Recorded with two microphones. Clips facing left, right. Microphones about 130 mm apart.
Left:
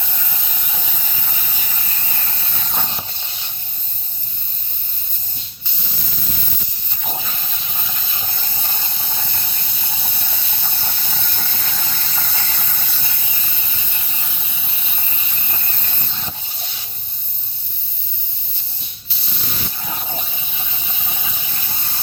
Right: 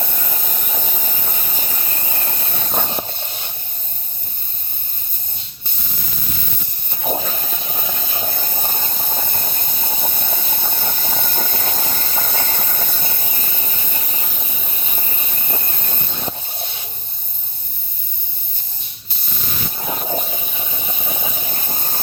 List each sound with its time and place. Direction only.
0.0 s steam: 50° right (ahead or behind)
7.0 s hiss: 45° right (ahead or behind)
19.8 s steam: 45° right (ahead or behind)